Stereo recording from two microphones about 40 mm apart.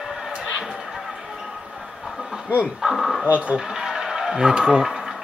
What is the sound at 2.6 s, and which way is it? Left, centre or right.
Speech, centre.